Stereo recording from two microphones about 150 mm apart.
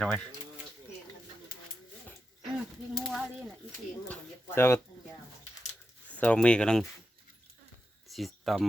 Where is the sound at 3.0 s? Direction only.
Centre (ahead or behind).